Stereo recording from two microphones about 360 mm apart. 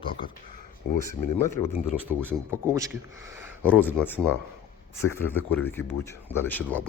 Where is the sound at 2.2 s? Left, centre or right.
Centre.